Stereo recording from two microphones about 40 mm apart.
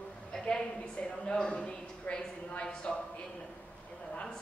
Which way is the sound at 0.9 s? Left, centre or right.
Left.